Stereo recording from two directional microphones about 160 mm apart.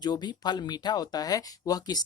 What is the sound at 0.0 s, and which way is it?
Speech, 25° left (ahead or behind).